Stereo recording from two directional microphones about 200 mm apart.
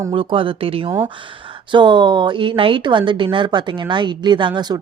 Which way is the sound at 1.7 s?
25° right (ahead or behind).